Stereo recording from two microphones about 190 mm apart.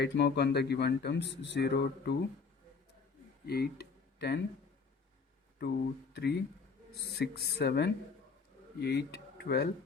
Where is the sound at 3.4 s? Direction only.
55° left (ahead or behind).